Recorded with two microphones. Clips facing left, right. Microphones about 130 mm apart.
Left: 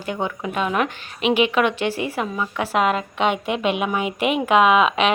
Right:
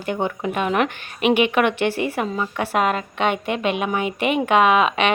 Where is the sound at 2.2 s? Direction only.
20° right (ahead or behind).